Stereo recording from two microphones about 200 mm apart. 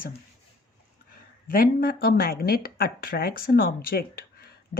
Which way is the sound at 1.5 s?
45° left (ahead or behind).